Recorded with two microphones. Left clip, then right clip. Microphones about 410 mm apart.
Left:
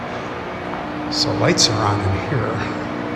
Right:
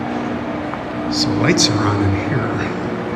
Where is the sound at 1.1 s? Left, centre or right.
Centre.